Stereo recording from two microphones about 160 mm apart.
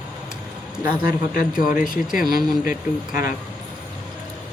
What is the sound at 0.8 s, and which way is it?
Speech, 65° left (ahead or behind).